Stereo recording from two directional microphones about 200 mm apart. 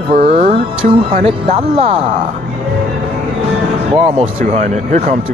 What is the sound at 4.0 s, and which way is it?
Speech, 30° right (ahead or behind).